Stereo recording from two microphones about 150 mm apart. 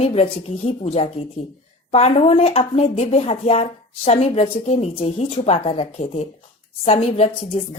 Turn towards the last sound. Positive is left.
turn(degrees=45)  # may be behind; listen again after turning